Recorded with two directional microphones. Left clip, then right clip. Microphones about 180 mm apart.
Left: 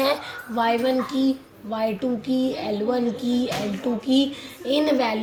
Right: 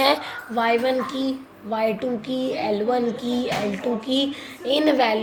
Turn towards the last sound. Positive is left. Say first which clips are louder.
# right 2 dB
turn(degrees=-35)  # may be behind; listen again after turning